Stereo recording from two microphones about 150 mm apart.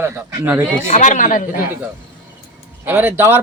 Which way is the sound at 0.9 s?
55° left (ahead or behind).